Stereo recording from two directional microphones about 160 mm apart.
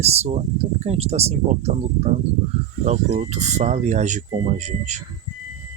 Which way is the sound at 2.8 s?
45° right (ahead or behind).